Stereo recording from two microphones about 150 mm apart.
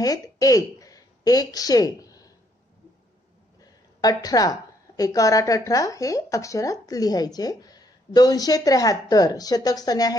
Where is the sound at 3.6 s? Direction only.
25° left (ahead or behind).